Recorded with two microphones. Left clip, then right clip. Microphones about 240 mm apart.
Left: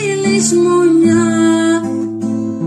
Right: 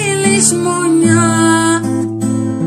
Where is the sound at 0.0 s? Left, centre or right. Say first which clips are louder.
Right 1 dB; right.